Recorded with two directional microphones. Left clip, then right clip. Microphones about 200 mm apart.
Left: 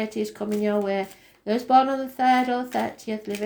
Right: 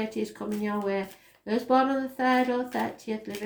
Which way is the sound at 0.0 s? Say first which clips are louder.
Left 4 dB; 45° left (ahead or behind).